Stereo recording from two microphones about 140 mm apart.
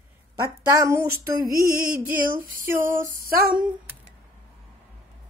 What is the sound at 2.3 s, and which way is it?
Speech, 15° right (ahead or behind).